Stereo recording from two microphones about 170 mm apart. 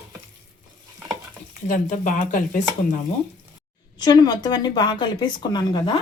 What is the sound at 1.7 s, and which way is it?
Speech, 50° left (ahead or behind).